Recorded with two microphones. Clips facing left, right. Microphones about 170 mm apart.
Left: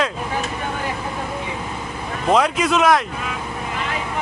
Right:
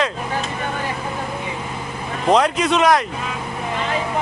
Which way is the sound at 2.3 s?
Centre (ahead or behind).